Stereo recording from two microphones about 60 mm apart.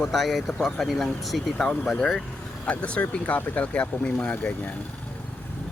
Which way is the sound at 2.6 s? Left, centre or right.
Left.